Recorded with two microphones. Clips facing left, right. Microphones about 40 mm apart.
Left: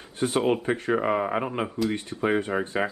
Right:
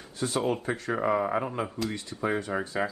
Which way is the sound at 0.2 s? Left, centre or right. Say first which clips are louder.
Left 4 dB; left.